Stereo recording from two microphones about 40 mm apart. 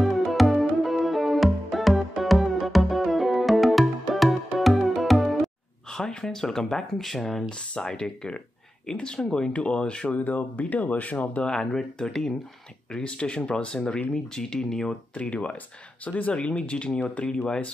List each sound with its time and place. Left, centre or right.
0.0 s music: centre
5.9 s speech: centre
7.4 s speech: left
10.0 s speech: left
11.4 s speech: centre
13.1 s speech: left
14.1 s speech: centre
15.1 s speech: left